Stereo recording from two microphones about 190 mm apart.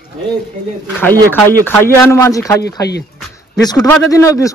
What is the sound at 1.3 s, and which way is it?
Speech, 10° left (ahead or behind).